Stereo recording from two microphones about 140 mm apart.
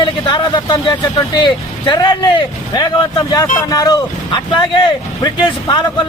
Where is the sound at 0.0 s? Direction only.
30° left (ahead or behind).